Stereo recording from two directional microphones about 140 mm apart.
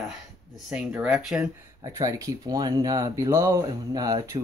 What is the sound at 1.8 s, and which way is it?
Speech, 25° right (ahead or behind).